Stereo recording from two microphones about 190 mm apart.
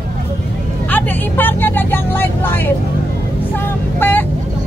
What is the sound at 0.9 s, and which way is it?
Vehicle, 10° left (ahead or behind).